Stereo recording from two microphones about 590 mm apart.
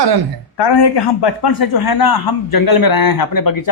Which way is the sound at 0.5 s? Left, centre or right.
Left.